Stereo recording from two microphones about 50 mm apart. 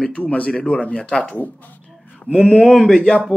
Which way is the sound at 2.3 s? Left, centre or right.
Centre.